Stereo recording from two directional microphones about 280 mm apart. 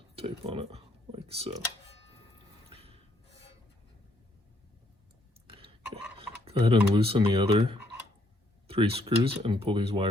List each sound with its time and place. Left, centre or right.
0.2 s speech: right
2.6 s snort: right
5.5 s a sound: centre
8.7 s speech: centre